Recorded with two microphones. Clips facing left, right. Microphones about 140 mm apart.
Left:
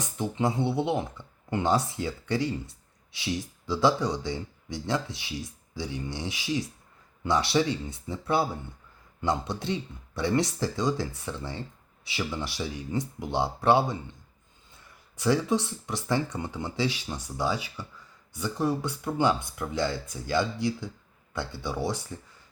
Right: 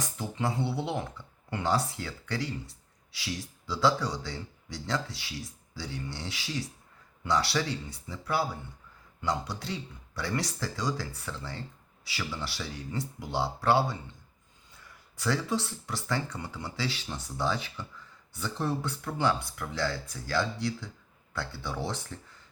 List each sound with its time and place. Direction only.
0.0 s speech: 20° left (ahead or behind)
15.1 s speech: 20° left (ahead or behind)